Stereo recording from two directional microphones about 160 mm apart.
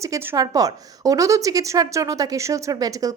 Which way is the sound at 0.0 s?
20° right (ahead or behind).